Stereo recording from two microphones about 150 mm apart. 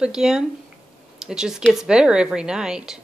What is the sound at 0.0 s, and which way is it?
Speech, 5° right (ahead or behind).